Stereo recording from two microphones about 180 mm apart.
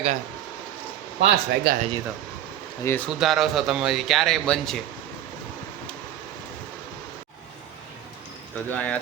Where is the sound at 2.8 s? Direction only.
10° left (ahead or behind).